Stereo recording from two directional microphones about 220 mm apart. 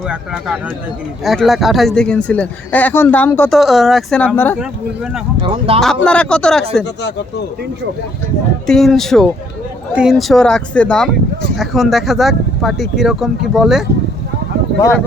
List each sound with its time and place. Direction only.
0.1 s speech: 5° right (ahead or behind)
5.4 s speech: 25° right (ahead or behind)
5.8 s speech: 5° left (ahead or behind)
8.6 s speech: centre (ahead or behind)